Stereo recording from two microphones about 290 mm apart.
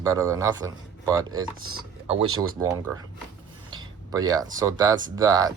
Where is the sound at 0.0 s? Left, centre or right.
Centre.